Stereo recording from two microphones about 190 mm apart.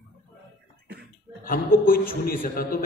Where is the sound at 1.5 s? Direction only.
50° left (ahead or behind).